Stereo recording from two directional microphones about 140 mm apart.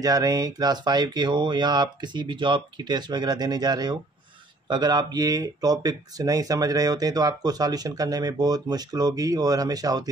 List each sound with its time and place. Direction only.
0.0 s speech: 25° right (ahead or behind)